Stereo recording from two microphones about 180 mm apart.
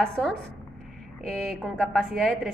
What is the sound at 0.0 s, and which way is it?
A woman's voice, 5° left (ahead or behind).